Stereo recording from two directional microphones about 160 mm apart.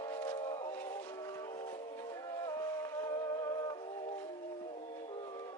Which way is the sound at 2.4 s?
20° left (ahead or behind).